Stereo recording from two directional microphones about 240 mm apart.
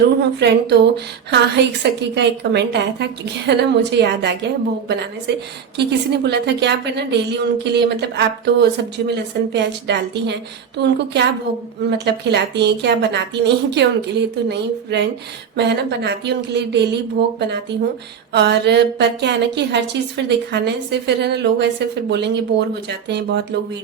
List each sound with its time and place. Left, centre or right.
0.2 s a woman's voice: right
1.8 s a woman's voice: right
5.3 s a woman's voice: right